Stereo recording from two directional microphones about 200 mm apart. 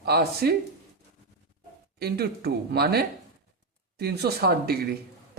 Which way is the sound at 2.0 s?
50° right (ahead or behind).